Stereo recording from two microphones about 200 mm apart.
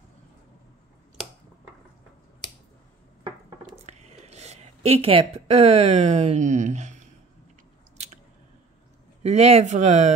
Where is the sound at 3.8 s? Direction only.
35° right (ahead or behind).